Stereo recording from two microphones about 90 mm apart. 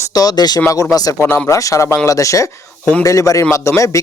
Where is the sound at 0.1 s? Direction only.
45° left (ahead or behind).